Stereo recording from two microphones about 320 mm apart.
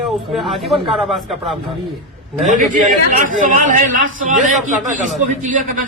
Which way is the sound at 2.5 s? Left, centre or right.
Right.